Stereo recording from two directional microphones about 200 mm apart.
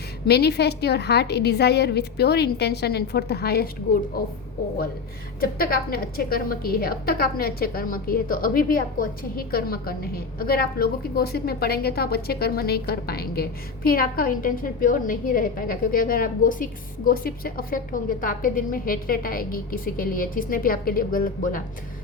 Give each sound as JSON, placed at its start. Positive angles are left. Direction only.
{"t": 0.3, "sound": "a woman's voice", "side_deg": 55}
{"t": 5.4, "sound": "a woman's voice", "side_deg": 50}